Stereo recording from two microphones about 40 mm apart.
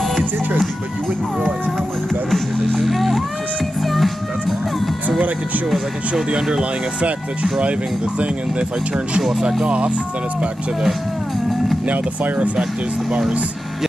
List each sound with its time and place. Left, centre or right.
2.3 s music: centre
6.3 s speech: centre
9.4 s speech: centre
9.7 s speech: right
11.9 s speech: right